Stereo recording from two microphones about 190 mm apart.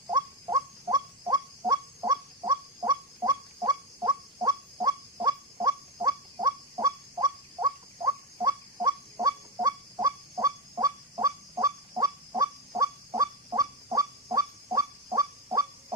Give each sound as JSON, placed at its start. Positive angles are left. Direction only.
{"t": 0.1, "sound": "fowl", "side_deg": -20}